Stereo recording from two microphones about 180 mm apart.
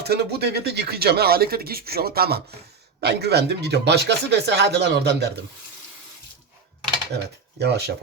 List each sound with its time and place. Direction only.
0.0 s speech: 65° right (ahead or behind)
7.6 s speech: 65° right (ahead or behind)